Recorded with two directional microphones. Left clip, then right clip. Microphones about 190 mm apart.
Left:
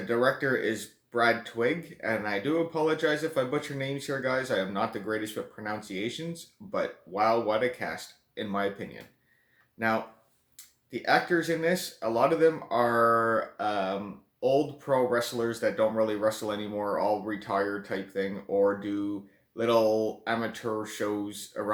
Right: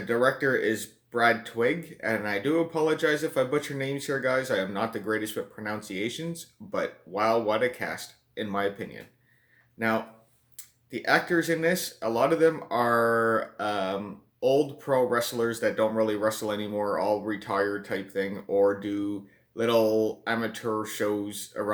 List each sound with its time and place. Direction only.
0.1 s speech: 25° right (ahead or behind)